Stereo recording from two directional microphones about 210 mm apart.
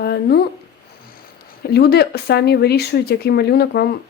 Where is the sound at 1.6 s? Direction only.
50° left (ahead or behind).